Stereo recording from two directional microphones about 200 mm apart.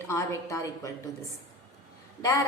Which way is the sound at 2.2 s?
15° left (ahead or behind).